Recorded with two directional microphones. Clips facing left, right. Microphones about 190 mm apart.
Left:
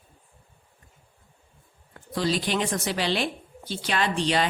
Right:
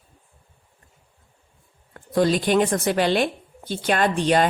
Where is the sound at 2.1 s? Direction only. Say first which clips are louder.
Right 7 dB; 50° right (ahead or behind).